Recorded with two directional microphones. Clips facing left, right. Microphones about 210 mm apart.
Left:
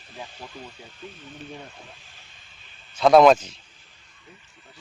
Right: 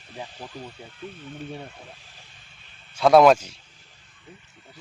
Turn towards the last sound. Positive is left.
turn(degrees=-10)  # may be behind; listen again after turning